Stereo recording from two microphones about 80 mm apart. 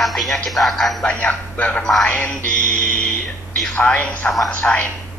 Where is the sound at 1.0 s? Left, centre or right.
Centre.